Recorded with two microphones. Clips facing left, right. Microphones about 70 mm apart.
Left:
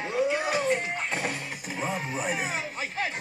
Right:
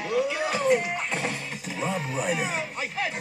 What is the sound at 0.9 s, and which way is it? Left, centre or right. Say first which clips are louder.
Speech: right 1 dB; centre.